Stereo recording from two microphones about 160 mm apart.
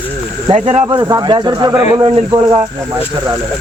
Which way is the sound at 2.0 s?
35° right (ahead or behind).